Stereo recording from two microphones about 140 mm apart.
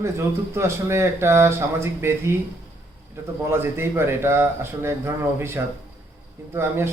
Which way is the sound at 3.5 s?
15° right (ahead or behind).